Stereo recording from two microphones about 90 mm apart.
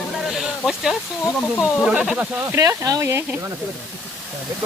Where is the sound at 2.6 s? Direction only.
40° right (ahead or behind).